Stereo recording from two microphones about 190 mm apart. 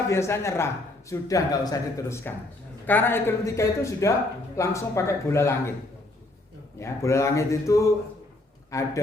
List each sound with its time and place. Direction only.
0.1 s a man's voice: 15° left (ahead or behind)
6.7 s a man's voice: 15° left (ahead or behind)